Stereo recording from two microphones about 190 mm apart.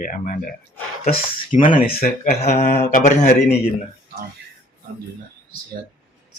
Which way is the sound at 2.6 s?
50° left (ahead or behind).